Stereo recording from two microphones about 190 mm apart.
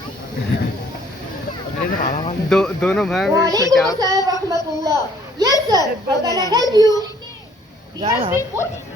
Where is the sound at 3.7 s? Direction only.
20° right (ahead or behind).